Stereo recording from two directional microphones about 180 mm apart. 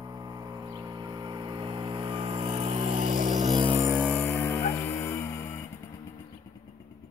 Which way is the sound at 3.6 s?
25° right (ahead or behind).